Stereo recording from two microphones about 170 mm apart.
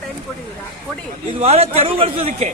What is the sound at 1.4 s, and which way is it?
A man's voice, 35° right (ahead or behind).